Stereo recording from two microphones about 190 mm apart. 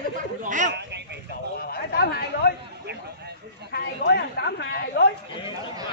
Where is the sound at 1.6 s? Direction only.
55° left (ahead or behind).